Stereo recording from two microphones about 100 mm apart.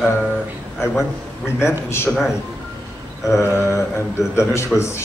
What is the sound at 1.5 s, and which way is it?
Speech, 25° left (ahead or behind).